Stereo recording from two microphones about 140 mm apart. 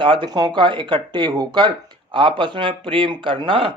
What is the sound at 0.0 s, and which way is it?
Speech, 35° right (ahead or behind).